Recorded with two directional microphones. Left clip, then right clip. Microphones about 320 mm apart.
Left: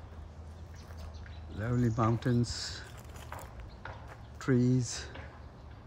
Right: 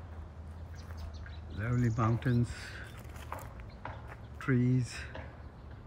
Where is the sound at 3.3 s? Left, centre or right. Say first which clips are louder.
Right 2 dB; right.